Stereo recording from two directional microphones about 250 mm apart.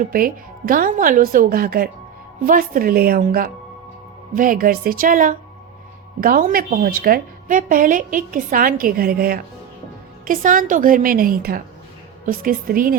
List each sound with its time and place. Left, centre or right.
0.0 s a woman's voice: right